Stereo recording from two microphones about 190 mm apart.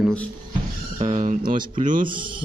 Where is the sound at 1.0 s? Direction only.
35° right (ahead or behind).